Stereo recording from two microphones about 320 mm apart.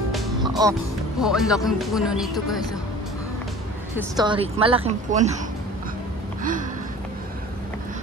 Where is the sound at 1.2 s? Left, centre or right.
Centre.